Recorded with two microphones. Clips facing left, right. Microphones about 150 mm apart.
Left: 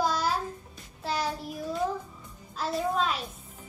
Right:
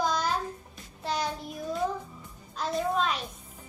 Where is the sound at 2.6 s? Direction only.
5° left (ahead or behind).